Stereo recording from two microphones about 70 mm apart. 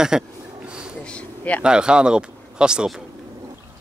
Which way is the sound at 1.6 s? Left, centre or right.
Centre.